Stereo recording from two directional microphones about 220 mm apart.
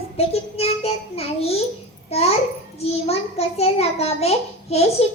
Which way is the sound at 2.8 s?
25° left (ahead or behind).